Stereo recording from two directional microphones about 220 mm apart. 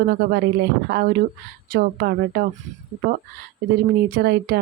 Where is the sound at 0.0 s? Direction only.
45° right (ahead or behind).